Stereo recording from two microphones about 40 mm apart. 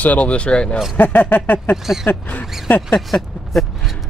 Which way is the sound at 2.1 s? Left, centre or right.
Left.